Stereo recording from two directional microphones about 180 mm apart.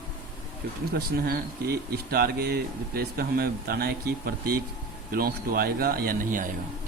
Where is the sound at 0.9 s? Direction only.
60° right (ahead or behind).